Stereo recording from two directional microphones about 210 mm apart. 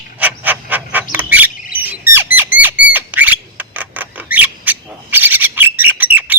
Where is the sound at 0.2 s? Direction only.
10° right (ahead or behind).